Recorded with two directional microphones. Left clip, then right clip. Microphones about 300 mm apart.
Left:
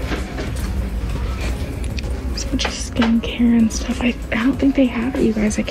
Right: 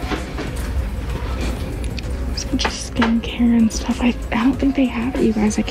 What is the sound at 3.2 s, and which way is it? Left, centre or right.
A woman's voice, centre.